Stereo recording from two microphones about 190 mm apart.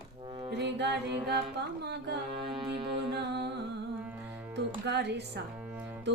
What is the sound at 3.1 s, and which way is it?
Music, 60° right (ahead or behind).